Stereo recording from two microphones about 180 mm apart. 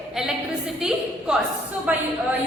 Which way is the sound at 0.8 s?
5° right (ahead or behind).